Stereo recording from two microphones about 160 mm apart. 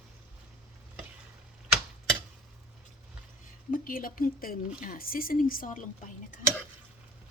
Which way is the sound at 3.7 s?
60° left (ahead or behind).